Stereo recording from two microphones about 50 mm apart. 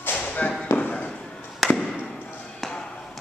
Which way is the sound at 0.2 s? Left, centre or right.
Left.